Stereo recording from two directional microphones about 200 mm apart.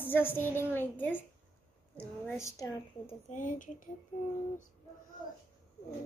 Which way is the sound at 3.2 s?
40° left (ahead or behind).